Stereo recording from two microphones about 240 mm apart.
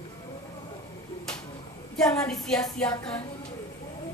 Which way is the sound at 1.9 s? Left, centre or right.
Centre.